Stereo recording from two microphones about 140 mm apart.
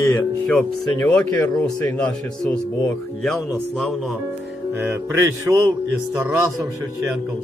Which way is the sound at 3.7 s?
Centre (ahead or behind).